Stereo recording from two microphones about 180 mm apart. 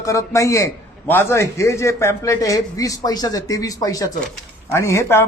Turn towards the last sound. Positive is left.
turn(degrees=15)  # may be behind; listen again after turning